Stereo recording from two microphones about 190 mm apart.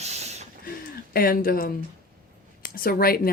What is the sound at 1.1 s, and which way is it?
Speech, 50° left (ahead or behind).